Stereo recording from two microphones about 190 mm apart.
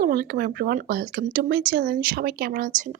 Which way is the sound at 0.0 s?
50° right (ahead or behind).